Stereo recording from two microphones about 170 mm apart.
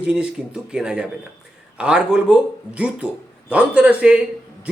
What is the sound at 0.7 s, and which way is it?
A man's voice, 5° right (ahead or behind).